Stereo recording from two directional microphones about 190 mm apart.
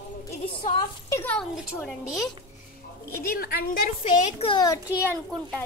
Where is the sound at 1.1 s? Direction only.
10° left (ahead or behind).